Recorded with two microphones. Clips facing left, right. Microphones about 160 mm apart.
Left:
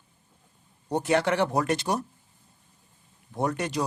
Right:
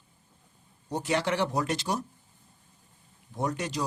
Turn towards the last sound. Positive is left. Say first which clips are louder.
# left 3 dB
turn(degrees=60)  # may be behind; listen again after turning